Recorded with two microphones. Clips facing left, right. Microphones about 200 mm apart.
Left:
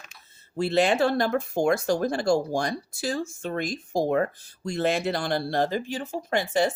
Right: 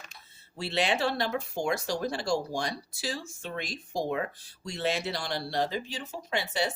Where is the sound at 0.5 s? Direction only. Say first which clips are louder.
Left 7 dB; 50° left (ahead or behind).